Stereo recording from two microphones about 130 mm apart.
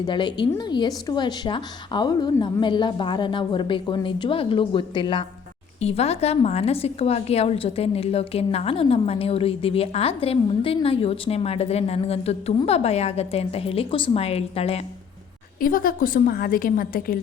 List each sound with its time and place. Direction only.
0.0 s speech: 35° left (ahead or behind)
5.8 s a woman's voice: 55° left (ahead or behind)
15.6 s a woman's voice: 90° left